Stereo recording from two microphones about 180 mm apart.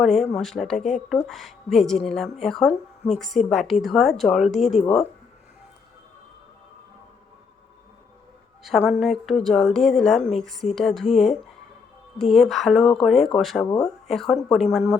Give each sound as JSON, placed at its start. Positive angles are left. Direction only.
{"t": 0.3, "sound": "a woman's voice", "side_deg": 0}
{"t": 4.8, "sound": "speech", "side_deg": 35}
{"t": 8.6, "sound": "a woman's voice", "side_deg": 0}